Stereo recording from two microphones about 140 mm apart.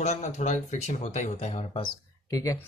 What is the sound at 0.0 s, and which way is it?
Speech, 55° left (ahead or behind).